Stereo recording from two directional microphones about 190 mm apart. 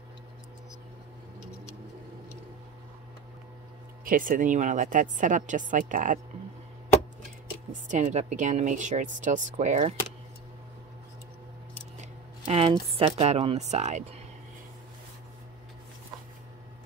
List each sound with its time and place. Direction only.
4.0 s a woman's voice: 45° right (ahead or behind)
7.9 s speech: 40° right (ahead or behind)
12.0 s speech: 30° right (ahead or behind)